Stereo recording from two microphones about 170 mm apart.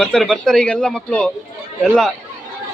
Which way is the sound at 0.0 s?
5° left (ahead or behind).